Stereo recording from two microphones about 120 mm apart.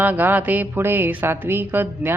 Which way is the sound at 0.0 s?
15° right (ahead or behind).